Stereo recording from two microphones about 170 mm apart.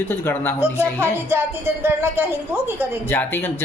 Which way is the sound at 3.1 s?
15° left (ahead or behind).